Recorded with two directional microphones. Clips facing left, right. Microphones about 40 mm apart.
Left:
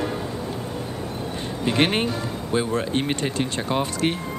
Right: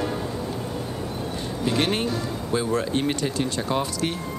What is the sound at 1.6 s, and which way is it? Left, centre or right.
Speech, left.